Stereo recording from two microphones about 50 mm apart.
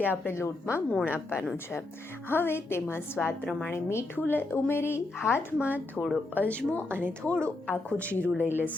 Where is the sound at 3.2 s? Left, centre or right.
Centre.